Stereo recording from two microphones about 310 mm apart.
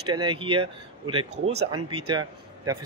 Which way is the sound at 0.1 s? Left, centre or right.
Centre.